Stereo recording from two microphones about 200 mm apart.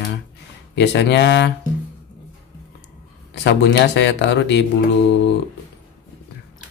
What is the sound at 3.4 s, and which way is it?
Speech, 60° left (ahead or behind).